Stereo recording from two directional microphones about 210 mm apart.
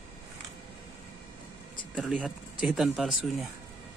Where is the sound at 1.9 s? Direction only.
Centre (ahead or behind).